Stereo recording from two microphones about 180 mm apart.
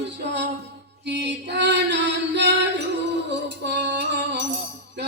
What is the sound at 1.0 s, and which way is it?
Music, 70° right (ahead or behind).